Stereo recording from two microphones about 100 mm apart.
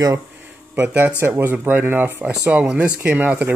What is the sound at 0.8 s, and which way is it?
Speech, 20° right (ahead or behind).